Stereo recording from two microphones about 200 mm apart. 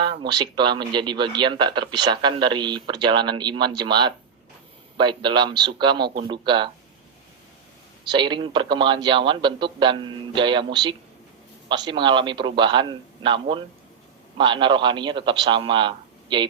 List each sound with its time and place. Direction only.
0.0 s speech: 20° right (ahead or behind)
8.1 s speech: 25° right (ahead or behind)